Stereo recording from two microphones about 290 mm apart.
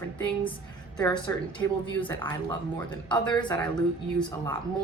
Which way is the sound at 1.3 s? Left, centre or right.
Centre.